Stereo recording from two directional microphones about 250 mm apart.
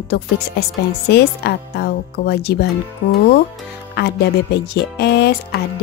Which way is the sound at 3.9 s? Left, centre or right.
Left.